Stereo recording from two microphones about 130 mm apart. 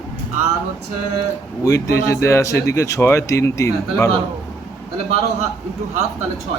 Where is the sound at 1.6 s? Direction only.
25° left (ahead or behind).